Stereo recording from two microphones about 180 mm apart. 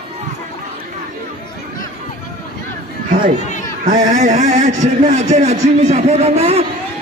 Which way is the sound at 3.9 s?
45° right (ahead or behind).